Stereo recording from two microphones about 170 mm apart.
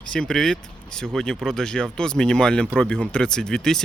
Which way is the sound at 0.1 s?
5° left (ahead or behind).